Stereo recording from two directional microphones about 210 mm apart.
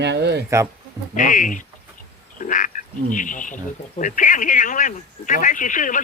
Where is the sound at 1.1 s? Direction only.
40° left (ahead or behind).